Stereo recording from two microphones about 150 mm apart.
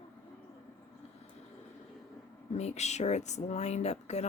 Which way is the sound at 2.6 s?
50° left (ahead or behind).